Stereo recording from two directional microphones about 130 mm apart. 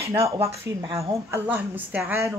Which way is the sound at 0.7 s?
25° right (ahead or behind).